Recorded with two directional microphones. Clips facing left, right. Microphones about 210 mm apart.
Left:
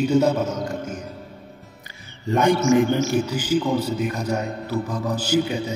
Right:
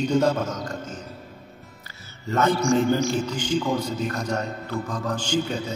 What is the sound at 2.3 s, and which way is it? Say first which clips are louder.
A man's voice: left 3 dB; 15° left (ahead or behind).